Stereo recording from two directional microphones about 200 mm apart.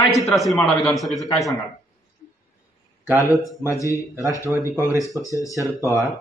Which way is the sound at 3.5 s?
15° left (ahead or behind).